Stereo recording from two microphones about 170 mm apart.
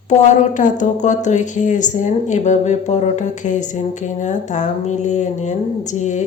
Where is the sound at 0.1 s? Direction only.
45° left (ahead or behind).